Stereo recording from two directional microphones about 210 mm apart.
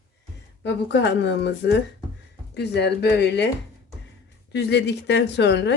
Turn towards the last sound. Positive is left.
turn(degrees=55)  # may be behind; listen again after turning